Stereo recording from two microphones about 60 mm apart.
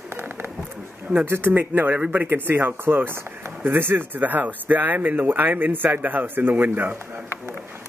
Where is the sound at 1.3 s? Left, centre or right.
Right.